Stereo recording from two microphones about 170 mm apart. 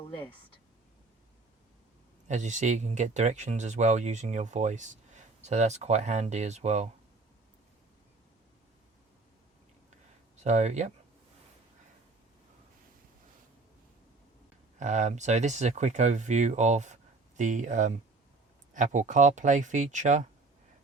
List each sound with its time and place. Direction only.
2.2 s speech: 45° right (ahead or behind)
10.3 s speech: 40° right (ahead or behind)
14.8 s speech: 45° right (ahead or behind)